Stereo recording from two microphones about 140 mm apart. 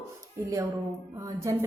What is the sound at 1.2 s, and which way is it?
Speech, 20° right (ahead or behind).